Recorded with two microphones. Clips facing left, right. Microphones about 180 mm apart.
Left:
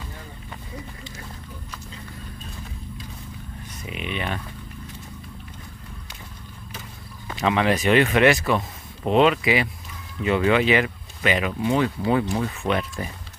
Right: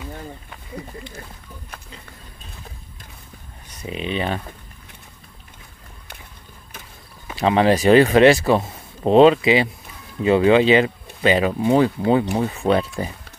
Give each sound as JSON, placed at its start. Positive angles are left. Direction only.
{"t": 3.8, "sound": "speech", "side_deg": -30}
{"t": 7.3, "sound": "speech", "side_deg": -35}